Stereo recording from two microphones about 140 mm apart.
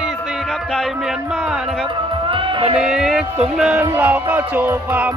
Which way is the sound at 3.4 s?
5° right (ahead or behind).